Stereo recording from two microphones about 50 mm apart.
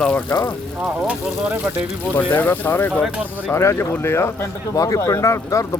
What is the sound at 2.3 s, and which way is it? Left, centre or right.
Speech, left.